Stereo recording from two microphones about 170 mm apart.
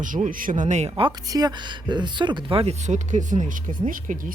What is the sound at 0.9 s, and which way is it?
Speech, 25° right (ahead or behind).